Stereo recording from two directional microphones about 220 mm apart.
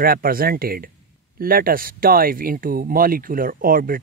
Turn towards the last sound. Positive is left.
turn(degrees=-40)  # may be behind; listen again after turning